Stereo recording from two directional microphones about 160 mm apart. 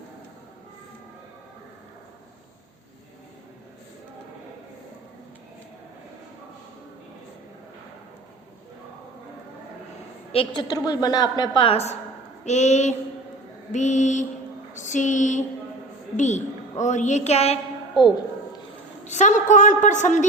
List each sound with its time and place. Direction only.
10.3 s a woman's voice: 30° left (ahead or behind)
19.0 s a woman's voice: 50° left (ahead or behind)